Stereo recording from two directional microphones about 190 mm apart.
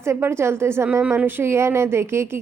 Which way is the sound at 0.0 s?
15° right (ahead or behind).